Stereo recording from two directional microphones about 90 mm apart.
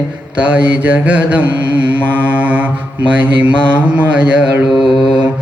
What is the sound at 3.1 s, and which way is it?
Mantra, 15° right (ahead or behind).